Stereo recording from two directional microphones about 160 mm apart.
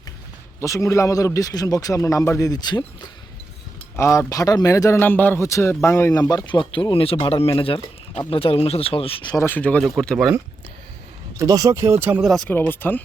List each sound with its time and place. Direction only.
0.6 s a man's voice: 20° left (ahead or behind)
3.9 s a man's voice: 15° left (ahead or behind); by 9.3 s 35° left (ahead or behind)
9.3 s speech: 15° left (ahead or behind)
11.3 s speech: 20° right (ahead or behind)
12.3 s speech: 5° left (ahead or behind)